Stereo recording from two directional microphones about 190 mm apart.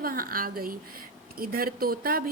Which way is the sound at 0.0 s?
50° right (ahead or behind).